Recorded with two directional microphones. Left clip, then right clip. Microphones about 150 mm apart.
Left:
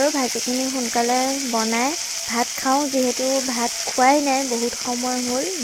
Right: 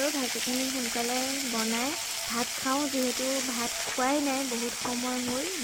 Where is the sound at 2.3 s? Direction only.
20° left (ahead or behind).